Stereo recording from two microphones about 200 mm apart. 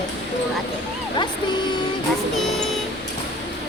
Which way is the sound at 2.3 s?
Centre (ahead or behind).